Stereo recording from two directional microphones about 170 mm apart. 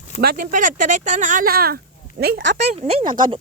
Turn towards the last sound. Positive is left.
turn(degrees=-25)  # may be behind; listen again after turning